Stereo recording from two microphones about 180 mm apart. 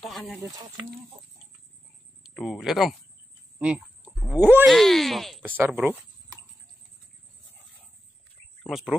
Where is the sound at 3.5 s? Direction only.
10° right (ahead or behind).